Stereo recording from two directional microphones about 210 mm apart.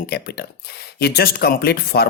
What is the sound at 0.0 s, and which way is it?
Speech, 50° left (ahead or behind).